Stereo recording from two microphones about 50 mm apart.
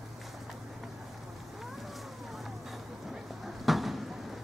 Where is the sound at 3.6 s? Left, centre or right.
Centre.